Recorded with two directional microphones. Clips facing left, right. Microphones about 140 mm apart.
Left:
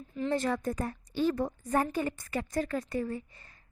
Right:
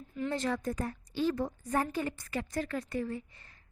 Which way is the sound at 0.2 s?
45° left (ahead or behind).